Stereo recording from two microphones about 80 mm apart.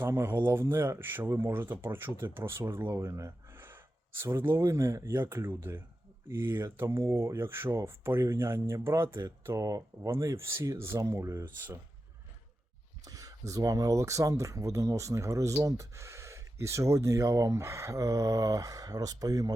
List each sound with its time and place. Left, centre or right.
0.0 s speech: right
13.1 s speech: right